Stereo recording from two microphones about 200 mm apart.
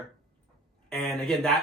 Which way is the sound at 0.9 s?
Centre (ahead or behind).